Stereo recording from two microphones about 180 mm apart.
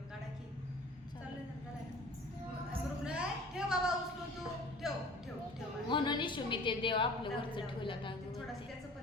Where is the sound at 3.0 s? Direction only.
5° right (ahead or behind).